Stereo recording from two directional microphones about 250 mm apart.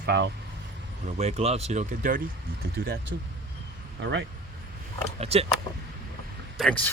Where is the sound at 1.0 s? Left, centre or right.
Right.